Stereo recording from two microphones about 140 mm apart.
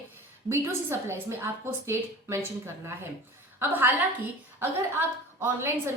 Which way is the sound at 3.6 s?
15° right (ahead or behind).